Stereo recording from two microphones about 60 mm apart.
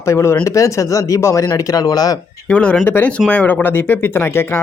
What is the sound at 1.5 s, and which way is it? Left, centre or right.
Speech, left.